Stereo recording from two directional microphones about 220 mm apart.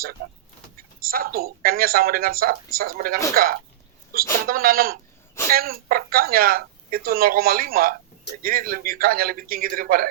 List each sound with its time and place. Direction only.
1.0 s speech: 40° right (ahead or behind)